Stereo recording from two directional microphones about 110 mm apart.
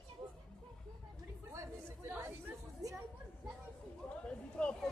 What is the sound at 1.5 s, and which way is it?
Chatter, 25° right (ahead or behind).